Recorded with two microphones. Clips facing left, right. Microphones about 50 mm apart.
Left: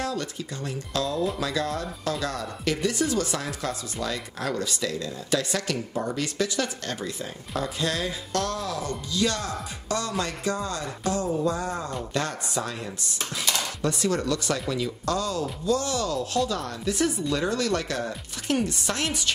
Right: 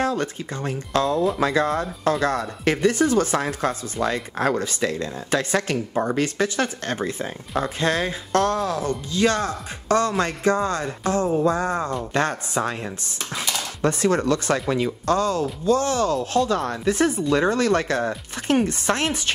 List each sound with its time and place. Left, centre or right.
0.0 s speech: right